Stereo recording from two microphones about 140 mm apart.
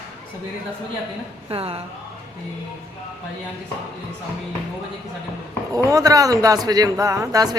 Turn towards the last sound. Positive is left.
turn(degrees=-25)  # may be behind; listen again after turning